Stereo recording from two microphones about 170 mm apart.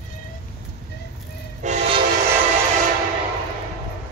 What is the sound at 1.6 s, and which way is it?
Train, 40° right (ahead or behind).